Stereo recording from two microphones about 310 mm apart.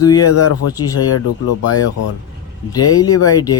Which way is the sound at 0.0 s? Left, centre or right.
Centre.